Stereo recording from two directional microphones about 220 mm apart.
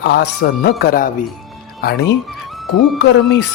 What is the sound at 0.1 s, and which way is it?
Speech, 50° left (ahead or behind).